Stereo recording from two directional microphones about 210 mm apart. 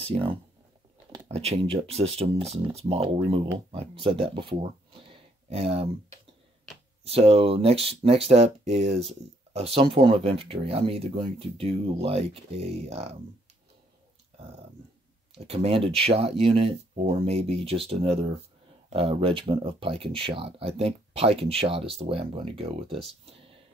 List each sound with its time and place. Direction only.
0.0 s speech: 25° right (ahead or behind)
5.1 s a sound: 25° right (ahead or behind)
7.1 s speech: 25° right (ahead or behind)
15.3 s speech: 30° right (ahead or behind)